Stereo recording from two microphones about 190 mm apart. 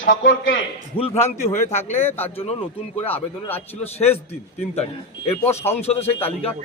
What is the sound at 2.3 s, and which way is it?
Speech, 30° left (ahead or behind).